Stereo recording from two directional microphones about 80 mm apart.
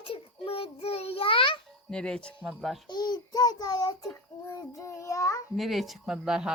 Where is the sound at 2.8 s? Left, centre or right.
Left.